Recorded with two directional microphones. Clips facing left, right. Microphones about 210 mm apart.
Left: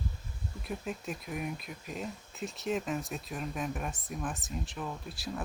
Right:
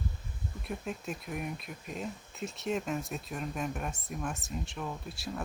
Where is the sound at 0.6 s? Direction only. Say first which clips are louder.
Even; centre (ahead or behind).